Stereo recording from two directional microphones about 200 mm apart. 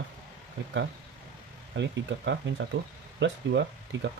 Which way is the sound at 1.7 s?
65° right (ahead or behind).